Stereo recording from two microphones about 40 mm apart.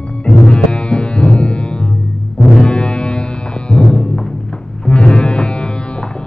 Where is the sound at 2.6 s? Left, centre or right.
Left.